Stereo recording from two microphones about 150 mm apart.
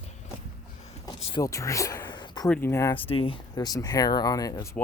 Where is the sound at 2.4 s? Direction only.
10° left (ahead or behind).